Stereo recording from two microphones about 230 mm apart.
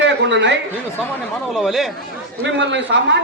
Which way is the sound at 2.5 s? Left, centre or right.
Right.